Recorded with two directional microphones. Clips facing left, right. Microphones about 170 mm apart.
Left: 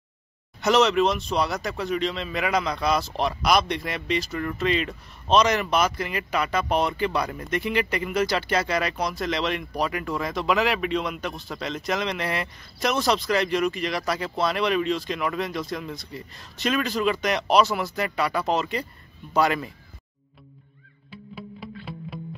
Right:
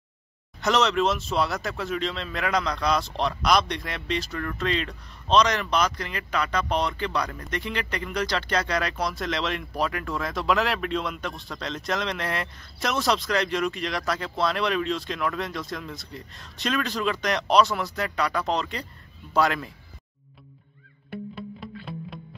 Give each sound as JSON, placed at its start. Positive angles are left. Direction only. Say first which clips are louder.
{"t": 0.6, "sound": "speech", "louder": "left 3 dB", "side_deg": 0}
{"t": 21.4, "sound": "music", "louder": "right 1 dB", "side_deg": 5}